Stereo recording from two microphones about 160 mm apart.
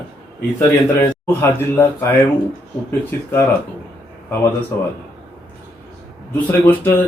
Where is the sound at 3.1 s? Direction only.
15° left (ahead or behind).